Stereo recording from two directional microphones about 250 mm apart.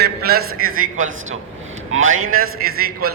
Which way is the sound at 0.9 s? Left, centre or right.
Right.